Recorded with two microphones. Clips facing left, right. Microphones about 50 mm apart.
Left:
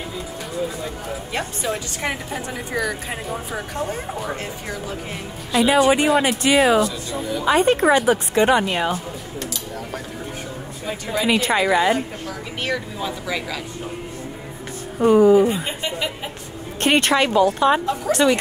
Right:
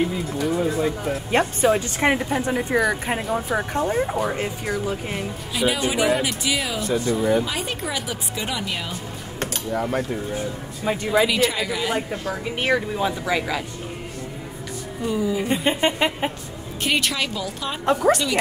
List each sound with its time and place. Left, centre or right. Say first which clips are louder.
1.3 s speech: right 7 dB; right
1.7 s speech: right 4 dB; right
5.7 s speech: left 5 dB; left
6.9 s a woman's voice: right 7 dB; right
7.4 s speech: left 12 dB; left
9.4 s a sound: right 8 dB; right
11.2 s speech: left 4 dB; left
12.3 s speech: right 7 dB; right
15.0 s speech: left 11 dB; left
15.5 s a woman's voice: right 5 dB; right
16.8 s speech: left 6 dB; left